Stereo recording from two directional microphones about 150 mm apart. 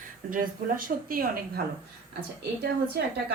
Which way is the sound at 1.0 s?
75° right (ahead or behind).